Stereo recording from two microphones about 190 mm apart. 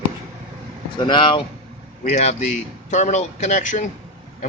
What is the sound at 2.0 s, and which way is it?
A man's voice, 35° left (ahead or behind).